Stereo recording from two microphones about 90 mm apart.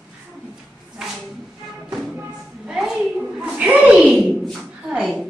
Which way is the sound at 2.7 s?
5° right (ahead or behind).